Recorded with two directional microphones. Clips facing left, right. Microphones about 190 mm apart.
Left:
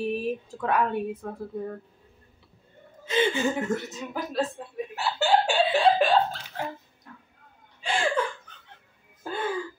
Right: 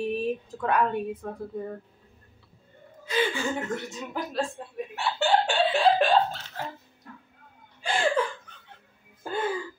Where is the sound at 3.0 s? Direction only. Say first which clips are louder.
Left 3 dB; 25° left (ahead or behind).